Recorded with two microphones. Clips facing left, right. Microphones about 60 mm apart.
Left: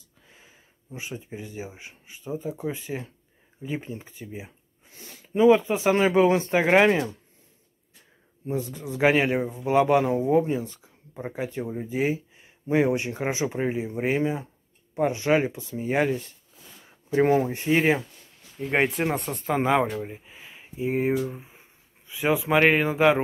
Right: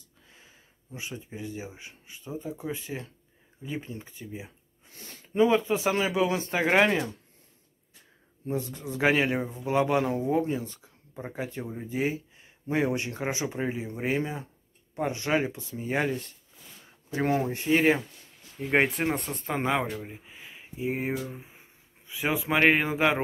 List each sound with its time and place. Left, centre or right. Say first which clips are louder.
0.3 s speech: left 2 dB; left
5.0 s a sound: left 4 dB; centre
5.6 s speech: left 4 dB; left
6.6 s speech: left 2 dB; centre
8.5 s speech: left 2 dB; left; by 23.2 s centre